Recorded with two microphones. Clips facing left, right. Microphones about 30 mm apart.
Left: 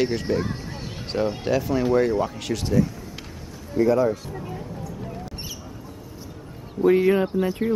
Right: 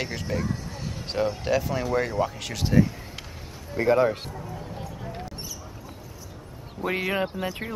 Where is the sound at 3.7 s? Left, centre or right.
Right.